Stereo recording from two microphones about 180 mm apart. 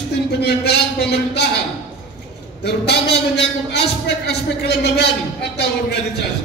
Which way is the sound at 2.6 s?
65° left (ahead or behind).